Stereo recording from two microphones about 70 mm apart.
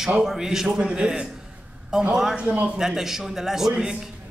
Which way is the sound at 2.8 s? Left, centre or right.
Centre.